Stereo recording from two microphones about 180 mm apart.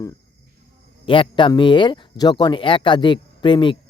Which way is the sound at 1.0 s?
30° left (ahead or behind).